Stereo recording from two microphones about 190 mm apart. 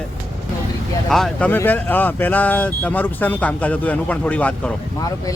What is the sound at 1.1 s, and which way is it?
Speech, 5° left (ahead or behind).